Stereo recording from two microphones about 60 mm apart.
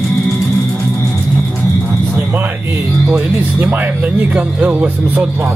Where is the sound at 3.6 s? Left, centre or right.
Right.